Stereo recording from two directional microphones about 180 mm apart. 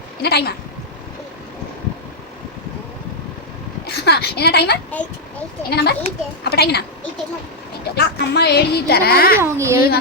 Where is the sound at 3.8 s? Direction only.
65° left (ahead or behind).